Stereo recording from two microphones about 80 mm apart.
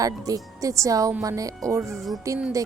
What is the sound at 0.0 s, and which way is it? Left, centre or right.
A woman's voice, right.